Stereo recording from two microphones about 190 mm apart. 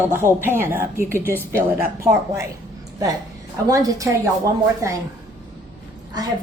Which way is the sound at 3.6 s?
20° right (ahead or behind).